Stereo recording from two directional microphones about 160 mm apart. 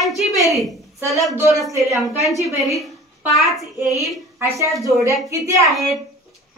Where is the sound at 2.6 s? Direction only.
Centre (ahead or behind).